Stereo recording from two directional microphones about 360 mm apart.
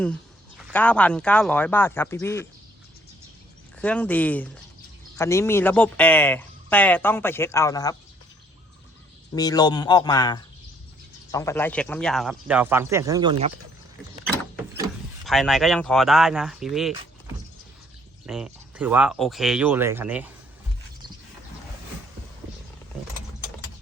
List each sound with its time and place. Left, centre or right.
0.7 s speech: centre
3.8 s speech: centre
9.3 s a man's voice: centre
15.2 s speech: centre
18.3 s speech: centre